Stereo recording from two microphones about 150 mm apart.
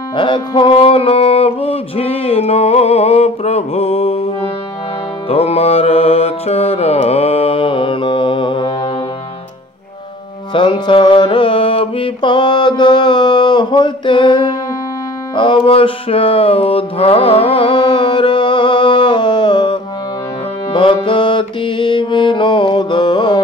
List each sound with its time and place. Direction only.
0.1 s music: 35° left (ahead or behind)
5.3 s mantra: 40° left (ahead or behind)
10.5 s mantra: 35° left (ahead or behind)
15.3 s music: 35° left (ahead or behind)